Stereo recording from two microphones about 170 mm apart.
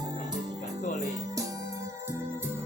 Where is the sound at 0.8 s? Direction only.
50° left (ahead or behind).